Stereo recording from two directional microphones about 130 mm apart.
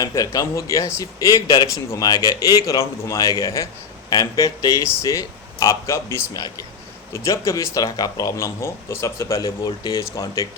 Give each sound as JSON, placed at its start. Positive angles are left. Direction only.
{"t": 0.0, "sound": "speech", "side_deg": 25}
{"t": 10.0, "sound": "speech", "side_deg": 25}